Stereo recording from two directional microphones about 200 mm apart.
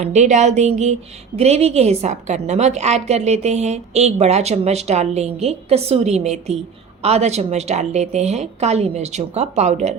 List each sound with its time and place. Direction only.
0.0 s a woman's voice: 35° right (ahead or behind)